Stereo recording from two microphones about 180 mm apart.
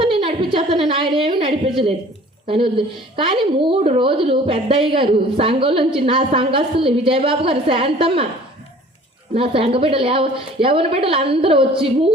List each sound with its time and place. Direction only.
0.0 s a woman's voice: 30° right (ahead or behind)
9.3 s a woman's voice: 30° right (ahead or behind)